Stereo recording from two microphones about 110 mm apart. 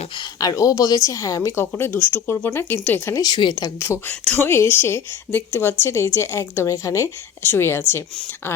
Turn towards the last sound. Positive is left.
turn(degrees=20)  # may be behind; listen again after turning